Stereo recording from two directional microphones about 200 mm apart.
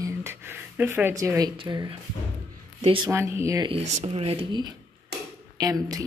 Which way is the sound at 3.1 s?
15° right (ahead or behind).